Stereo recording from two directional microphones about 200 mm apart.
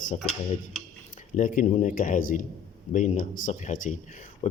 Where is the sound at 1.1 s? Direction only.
40° left (ahead or behind).